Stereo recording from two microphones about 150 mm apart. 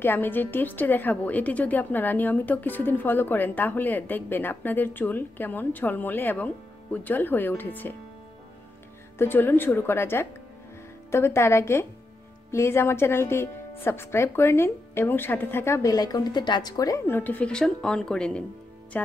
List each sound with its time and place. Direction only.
0.0 s a woman's voice: 15° left (ahead or behind)
9.2 s a woman's voice: 15° left (ahead or behind)